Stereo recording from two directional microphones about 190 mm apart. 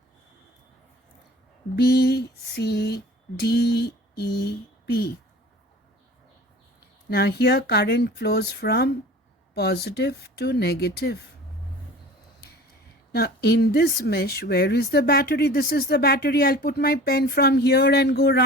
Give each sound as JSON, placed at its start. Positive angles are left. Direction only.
{"t": 1.7, "sound": "a woman's voice", "side_deg": 60}
{"t": 7.1, "sound": "a woman's voice", "side_deg": 60}
{"t": 13.1, "sound": "a woman's voice", "side_deg": 60}